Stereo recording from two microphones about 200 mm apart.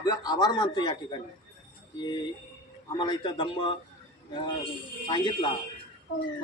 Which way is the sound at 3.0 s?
25° left (ahead or behind).